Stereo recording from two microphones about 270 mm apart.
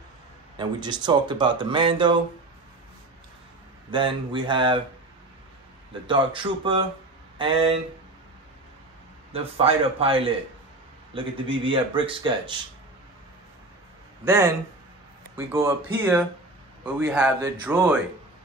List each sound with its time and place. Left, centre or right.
0.6 s speech: centre
3.9 s speech: centre
6.0 s speech: centre
9.3 s speech: right
14.2 s speech: centre